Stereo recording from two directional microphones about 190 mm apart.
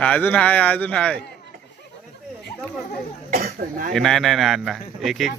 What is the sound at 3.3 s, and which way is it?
Speech, 45° right (ahead or behind).